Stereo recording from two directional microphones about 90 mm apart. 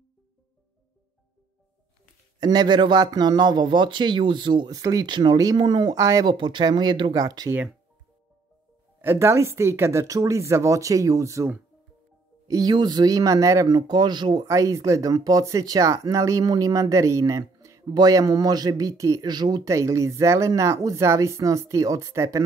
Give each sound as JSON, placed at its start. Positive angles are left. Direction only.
{"t": 2.4, "sound": "a man's voice", "side_deg": -50}
{"t": 4.6, "sound": "speech", "side_deg": -40}
{"t": 5.0, "sound": "a man's voice", "side_deg": -55}
{"t": 5.9, "sound": "speech", "side_deg": -40}
{"t": 6.2, "sound": "a man's voice", "side_deg": -55}
{"t": 7.2, "sound": "speech", "side_deg": -40}
{"t": 9.0, "sound": "speech", "side_deg": -25}
{"t": 12.4, "sound": "speech", "side_deg": -45}
{"t": 13.7, "sound": "speech", "side_deg": -50}
{"t": 14.4, "sound": "speech", "side_deg": -40}
{"t": 19.2, "sound": "speech", "side_deg": -50}
{"t": 19.6, "sound": "speech", "side_deg": -35}